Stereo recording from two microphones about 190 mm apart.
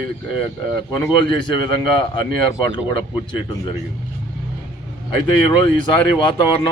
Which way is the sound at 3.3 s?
25° left (ahead or behind).